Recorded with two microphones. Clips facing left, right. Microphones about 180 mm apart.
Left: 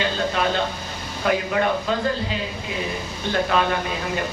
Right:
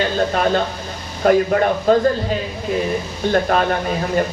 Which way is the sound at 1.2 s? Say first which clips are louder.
Right 7 dB; 45° right (ahead or behind).